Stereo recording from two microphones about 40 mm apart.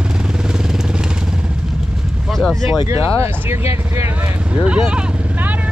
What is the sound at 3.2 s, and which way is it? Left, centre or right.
Speech, right.